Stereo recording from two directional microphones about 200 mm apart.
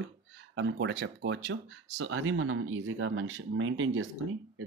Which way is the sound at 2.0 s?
90° right.